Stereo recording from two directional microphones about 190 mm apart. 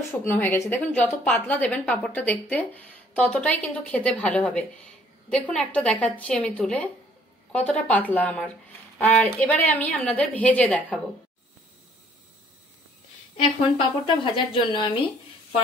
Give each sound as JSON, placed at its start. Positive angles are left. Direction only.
{"t": 0.1, "sound": "a woman's voice", "side_deg": 10}
{"t": 13.7, "sound": "speech", "side_deg": 25}